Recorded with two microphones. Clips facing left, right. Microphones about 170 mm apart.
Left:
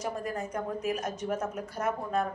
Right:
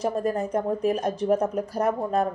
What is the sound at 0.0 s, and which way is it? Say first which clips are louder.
A woman's voice: right 8 dB; 35° right (ahead or behind).